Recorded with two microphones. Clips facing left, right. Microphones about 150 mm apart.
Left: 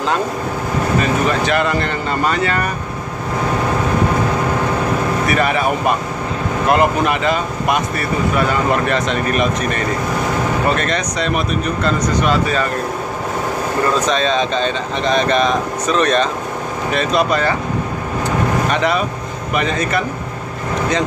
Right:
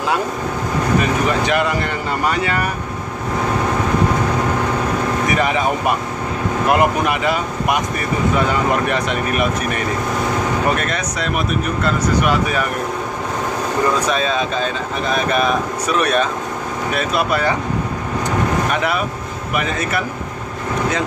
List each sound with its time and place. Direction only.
1.4 s speech: 15° right (ahead or behind)
5.2 s speech: 15° right (ahead or behind)
8.8 s speech: 15° right (ahead or behind)
13.9 s speech: 10° right (ahead or behind)
18.7 s speech: 5° right (ahead or behind)